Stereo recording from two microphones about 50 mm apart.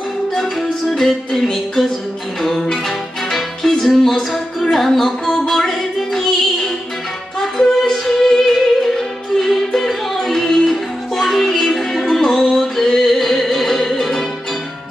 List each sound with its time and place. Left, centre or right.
0.3 s music: centre